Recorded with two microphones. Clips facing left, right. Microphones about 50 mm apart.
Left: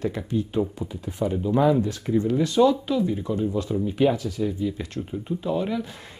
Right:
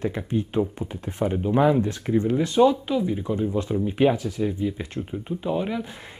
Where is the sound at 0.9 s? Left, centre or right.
Right.